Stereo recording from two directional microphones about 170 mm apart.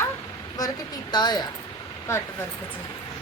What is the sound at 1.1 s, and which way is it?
Speech, 25° left (ahead or behind).